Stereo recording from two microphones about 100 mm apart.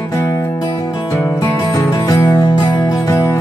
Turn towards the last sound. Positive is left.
turn(degrees=35)  # may be behind; listen again after turning